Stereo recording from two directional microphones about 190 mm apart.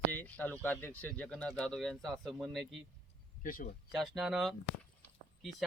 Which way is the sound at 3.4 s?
45° left (ahead or behind).